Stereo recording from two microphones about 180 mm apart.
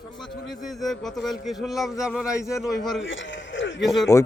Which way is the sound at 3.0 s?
90° left.